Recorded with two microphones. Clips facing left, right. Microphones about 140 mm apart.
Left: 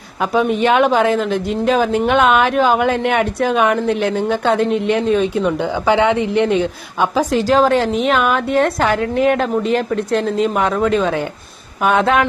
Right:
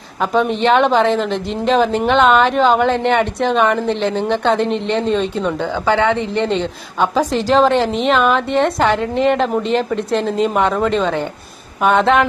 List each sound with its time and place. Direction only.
0.2 s speech: 5° left (ahead or behind)